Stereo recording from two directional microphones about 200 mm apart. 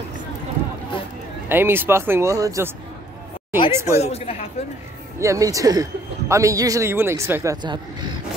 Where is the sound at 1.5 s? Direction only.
10° right (ahead or behind).